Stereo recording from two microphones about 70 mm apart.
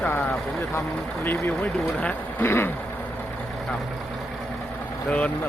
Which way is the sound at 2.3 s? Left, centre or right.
Left.